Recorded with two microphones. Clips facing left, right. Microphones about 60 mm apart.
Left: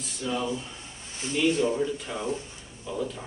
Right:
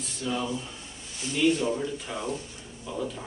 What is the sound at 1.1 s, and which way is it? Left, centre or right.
Speech, left.